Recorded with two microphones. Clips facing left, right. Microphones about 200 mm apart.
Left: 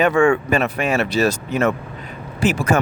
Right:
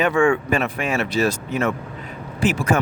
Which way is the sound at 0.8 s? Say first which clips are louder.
Left 3 dB; 70° left (ahead or behind).